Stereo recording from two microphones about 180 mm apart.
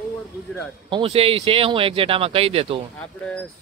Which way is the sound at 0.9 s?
30° right (ahead or behind).